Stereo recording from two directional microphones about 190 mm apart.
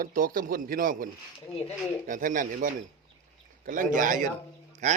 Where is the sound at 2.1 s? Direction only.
45° right (ahead or behind).